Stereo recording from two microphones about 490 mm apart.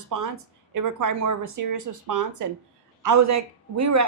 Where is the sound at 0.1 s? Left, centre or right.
Right.